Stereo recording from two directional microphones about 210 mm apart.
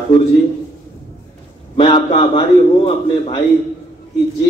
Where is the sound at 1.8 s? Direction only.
25° left (ahead or behind).